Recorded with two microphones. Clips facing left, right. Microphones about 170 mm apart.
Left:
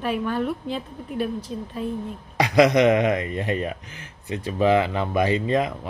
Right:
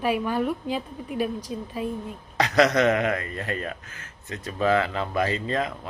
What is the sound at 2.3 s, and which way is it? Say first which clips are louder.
Speech: left 3 dB; 10° left (ahead or behind).